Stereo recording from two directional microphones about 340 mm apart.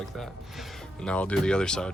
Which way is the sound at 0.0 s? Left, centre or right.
Centre.